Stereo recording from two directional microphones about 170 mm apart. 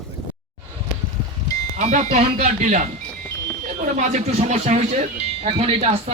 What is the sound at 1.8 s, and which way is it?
Speech, 45° right (ahead or behind).